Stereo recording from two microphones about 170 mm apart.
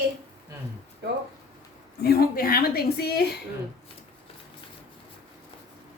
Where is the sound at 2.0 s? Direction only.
70° left (ahead or behind).